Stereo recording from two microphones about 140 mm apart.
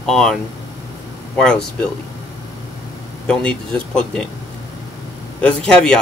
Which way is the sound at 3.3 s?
5° left (ahead or behind).